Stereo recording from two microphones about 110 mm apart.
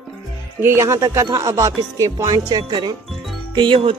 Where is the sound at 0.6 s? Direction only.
25° right (ahead or behind); by 2.9 s 40° right (ahead or behind).